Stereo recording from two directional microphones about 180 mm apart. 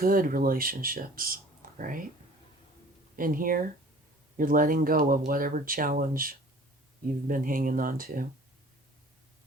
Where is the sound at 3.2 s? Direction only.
50° right (ahead or behind).